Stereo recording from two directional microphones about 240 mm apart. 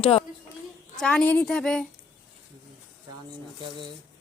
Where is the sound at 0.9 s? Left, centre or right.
Centre.